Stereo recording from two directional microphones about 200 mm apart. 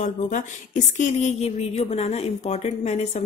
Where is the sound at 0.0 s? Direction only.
40° left (ahead or behind).